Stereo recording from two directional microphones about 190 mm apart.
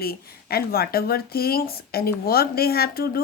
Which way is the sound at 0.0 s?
55° left (ahead or behind).